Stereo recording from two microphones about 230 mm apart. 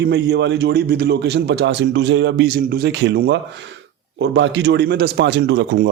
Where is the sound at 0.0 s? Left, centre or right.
Right.